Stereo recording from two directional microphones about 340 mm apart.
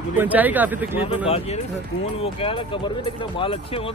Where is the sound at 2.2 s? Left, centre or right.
Centre.